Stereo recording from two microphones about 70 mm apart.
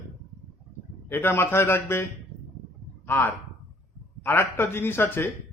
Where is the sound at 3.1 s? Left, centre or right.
Left.